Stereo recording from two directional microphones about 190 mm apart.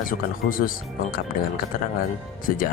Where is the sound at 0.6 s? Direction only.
50° left (ahead or behind).